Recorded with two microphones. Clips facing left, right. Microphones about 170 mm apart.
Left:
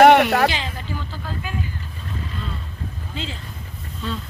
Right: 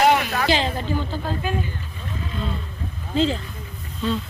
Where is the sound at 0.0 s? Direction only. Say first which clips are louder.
Left 6 dB; 65° left (ahead or behind).